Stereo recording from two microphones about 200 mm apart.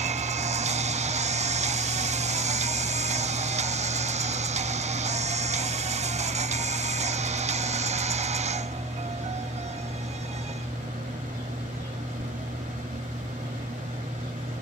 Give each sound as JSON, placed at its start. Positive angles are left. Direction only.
{"t": 0.0, "sound": "music", "side_deg": -35}